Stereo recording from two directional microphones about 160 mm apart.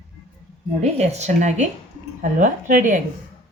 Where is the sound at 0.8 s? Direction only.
45° right (ahead or behind).